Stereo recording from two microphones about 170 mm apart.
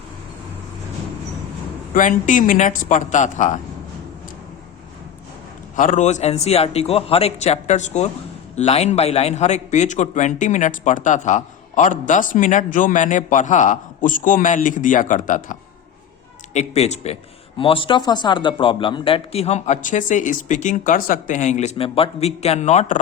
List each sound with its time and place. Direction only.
1.9 s a man's voice: 50° left (ahead or behind)
5.7 s a man's voice: 50° left (ahead or behind)
16.6 s a man's voice: 40° left (ahead or behind)